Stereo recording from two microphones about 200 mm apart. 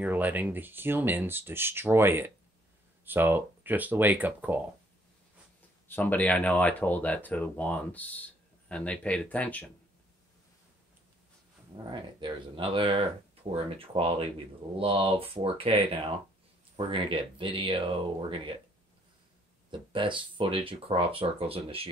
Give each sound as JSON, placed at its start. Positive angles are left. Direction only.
{"t": 0.0, "sound": "speech", "side_deg": -10}
{"t": 5.9, "sound": "speech", "side_deg": 10}
{"t": 11.9, "sound": "speech", "side_deg": -25}
{"t": 19.7, "sound": "speech", "side_deg": -25}